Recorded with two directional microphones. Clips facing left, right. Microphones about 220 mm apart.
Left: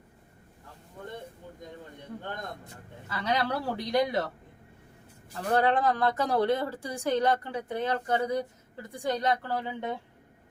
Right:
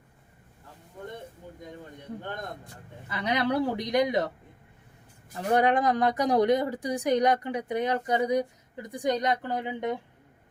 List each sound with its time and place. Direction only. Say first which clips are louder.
3.1 s speech: right 2 dB; 20° right (ahead or behind)
5.4 s speech: right 2 dB; 15° right (ahead or behind)